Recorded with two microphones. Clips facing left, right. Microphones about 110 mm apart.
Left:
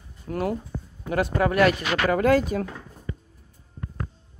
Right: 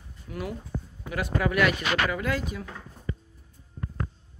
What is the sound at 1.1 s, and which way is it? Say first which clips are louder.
Speech: left 5 dB; 35° left (ahead or behind).